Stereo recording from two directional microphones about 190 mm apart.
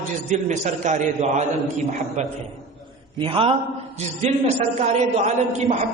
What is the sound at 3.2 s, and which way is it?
Speech, 25° right (ahead or behind).